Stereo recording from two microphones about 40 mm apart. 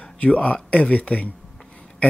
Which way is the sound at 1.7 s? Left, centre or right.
Left.